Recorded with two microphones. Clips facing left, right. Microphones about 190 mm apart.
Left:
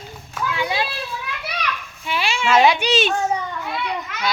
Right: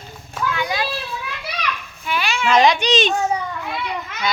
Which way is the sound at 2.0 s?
30° left (ahead or behind).